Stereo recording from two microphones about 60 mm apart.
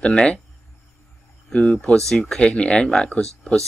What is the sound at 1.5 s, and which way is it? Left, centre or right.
Speech, centre.